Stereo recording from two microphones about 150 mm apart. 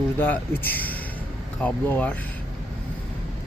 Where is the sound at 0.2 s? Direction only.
15° left (ahead or behind).